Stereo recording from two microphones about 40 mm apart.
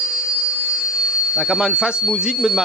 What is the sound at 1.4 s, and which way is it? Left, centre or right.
Speech, centre.